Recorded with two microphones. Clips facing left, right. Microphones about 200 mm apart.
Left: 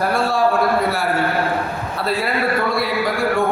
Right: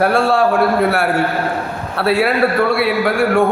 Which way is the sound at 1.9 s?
70° right (ahead or behind).